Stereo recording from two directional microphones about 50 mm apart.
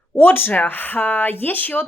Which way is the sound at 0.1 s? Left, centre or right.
Left.